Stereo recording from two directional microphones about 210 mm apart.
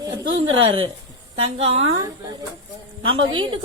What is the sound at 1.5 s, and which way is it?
A woman's voice, 30° right (ahead or behind).